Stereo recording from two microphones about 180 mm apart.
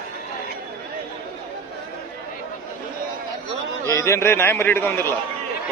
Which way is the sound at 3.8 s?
15° left (ahead or behind).